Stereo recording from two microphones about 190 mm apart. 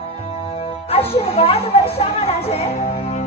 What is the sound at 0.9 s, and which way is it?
Music, 30° left (ahead or behind).